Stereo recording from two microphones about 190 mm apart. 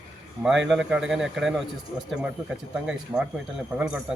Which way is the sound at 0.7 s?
Centre (ahead or behind).